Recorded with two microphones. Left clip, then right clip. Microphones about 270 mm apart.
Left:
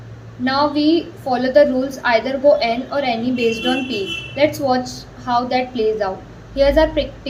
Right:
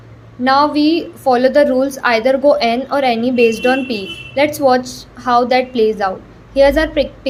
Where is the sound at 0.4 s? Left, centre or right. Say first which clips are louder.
Right 5 dB; right.